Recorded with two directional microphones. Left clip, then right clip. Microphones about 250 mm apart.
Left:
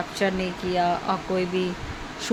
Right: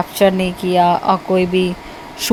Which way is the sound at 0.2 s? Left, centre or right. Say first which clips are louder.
Right 12 dB; right.